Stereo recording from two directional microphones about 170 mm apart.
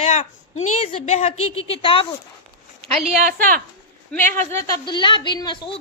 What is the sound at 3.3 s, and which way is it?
Speech, 55° right (ahead or behind).